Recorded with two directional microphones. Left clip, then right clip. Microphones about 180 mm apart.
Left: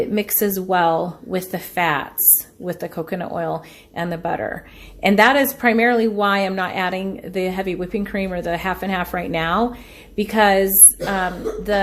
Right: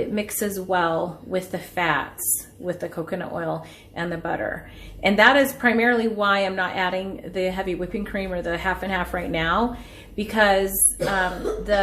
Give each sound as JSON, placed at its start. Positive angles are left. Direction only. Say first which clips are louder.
{"t": 0.1, "sound": "a woman's voice", "louder": "left 5 dB", "side_deg": 50}